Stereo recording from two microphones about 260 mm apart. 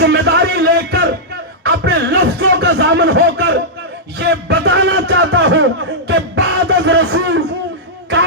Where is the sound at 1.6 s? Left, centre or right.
Right.